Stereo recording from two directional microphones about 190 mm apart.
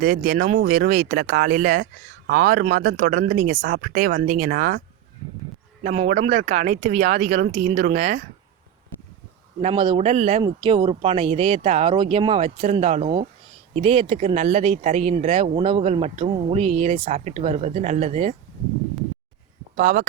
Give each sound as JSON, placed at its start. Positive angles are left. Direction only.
{"t": 0.0, "sound": "speech", "side_deg": -45}
{"t": 5.8, "sound": "speech", "side_deg": -40}
{"t": 9.6, "sound": "speech", "side_deg": -30}
{"t": 10.4, "sound": "speech", "side_deg": -25}
{"t": 19.7, "sound": "speech", "side_deg": -45}